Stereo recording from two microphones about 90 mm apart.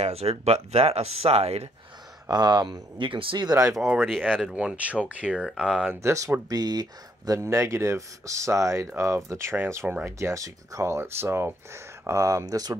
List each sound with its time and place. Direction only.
0.7 s speech: 90° right
2.2 s speech: 50° right (ahead or behind); by 3.4 s 70° right (ahead or behind)
3.6 s speech: 5° right (ahead or behind)
4.6 s speech: 15° right (ahead or behind)
5.4 s speech: centre (ahead or behind)
5.9 s speech: 35° right (ahead or behind)
6.5 s speech: 45° right (ahead or behind)
7.3 s speech: 30° right (ahead or behind)